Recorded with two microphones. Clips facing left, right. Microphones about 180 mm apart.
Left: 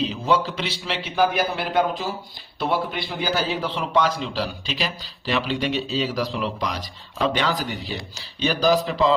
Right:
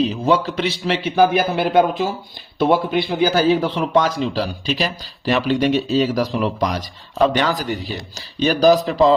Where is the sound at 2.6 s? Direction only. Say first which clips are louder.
Right 8 dB; 50° right (ahead or behind).